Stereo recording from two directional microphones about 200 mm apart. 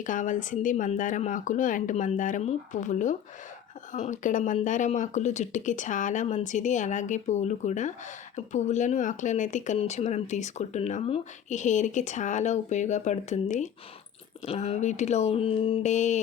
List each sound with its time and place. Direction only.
0.0 s speech: 40° left (ahead or behind)